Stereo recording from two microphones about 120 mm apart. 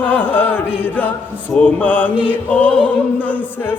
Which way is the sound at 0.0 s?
15° left (ahead or behind).